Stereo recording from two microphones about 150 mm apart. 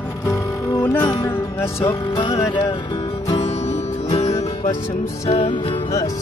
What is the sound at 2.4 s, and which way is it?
Music, 20° left (ahead or behind).